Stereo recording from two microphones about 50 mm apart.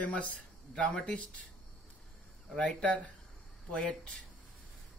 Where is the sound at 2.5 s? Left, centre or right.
Left.